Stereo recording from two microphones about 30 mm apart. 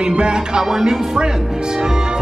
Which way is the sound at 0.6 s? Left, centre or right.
Centre.